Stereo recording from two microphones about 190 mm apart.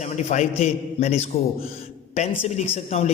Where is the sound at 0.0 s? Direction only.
40° left (ahead or behind).